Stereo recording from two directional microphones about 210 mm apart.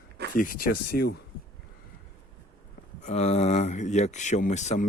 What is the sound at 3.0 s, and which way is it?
Speech, 30° left (ahead or behind).